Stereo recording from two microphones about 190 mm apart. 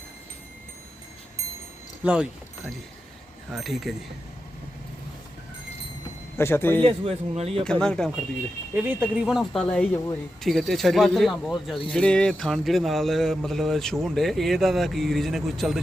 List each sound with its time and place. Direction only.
3.5 s speech: centre (ahead or behind)
6.3 s speech: 10° left (ahead or behind)
6.8 s speech: 30° right (ahead or behind)
7.6 s speech: 5° left (ahead or behind)
8.7 s speech: 10° right (ahead or behind)